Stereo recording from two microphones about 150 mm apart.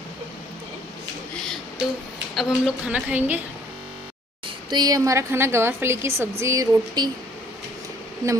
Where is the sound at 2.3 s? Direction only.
5° right (ahead or behind).